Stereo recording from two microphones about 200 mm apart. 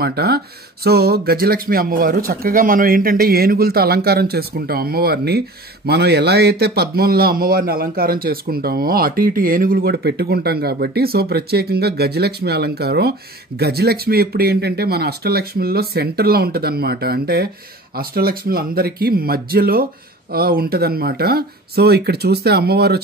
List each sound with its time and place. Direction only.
0.0 s speech: 50° right (ahead or behind)